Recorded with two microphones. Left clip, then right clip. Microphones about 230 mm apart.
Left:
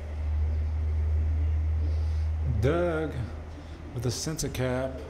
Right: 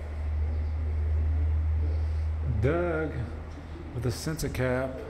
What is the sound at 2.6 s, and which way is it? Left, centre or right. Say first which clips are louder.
Music: left 1 dB; centre.